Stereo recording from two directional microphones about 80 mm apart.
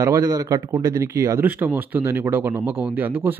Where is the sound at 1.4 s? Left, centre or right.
Right.